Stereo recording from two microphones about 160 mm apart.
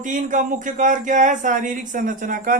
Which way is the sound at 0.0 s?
55° right (ahead or behind).